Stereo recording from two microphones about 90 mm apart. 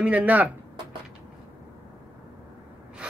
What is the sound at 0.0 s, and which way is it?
Speech, 15° right (ahead or behind).